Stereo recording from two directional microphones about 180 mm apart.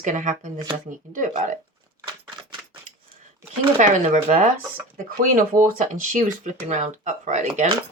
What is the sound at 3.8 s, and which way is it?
Speech, 45° right (ahead or behind).